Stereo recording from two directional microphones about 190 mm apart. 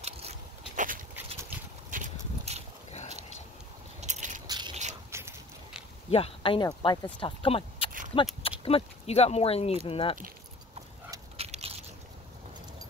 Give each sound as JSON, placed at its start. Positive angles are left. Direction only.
{"t": 0.0, "sound": "biting", "side_deg": -35}
{"t": 1.9, "sound": "a sound", "side_deg": -40}
{"t": 4.0, "sound": "biting", "side_deg": -40}
{"t": 4.5, "sound": "a sound", "side_deg": -20}
{"t": 6.0, "sound": "speech", "side_deg": 30}
{"t": 11.3, "sound": "dog", "side_deg": -30}